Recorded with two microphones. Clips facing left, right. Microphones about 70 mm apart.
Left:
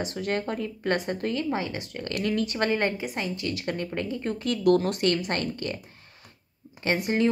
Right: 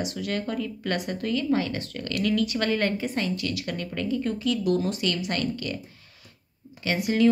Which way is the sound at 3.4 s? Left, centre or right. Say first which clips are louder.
Left 1 dB; left.